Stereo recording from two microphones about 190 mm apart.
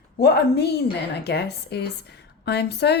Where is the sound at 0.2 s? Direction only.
60° left (ahead or behind).